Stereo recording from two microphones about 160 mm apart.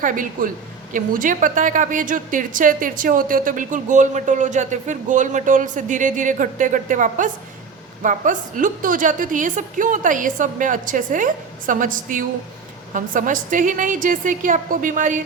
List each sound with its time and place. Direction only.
0.0 s a woman's voice: 55° right (ahead or behind)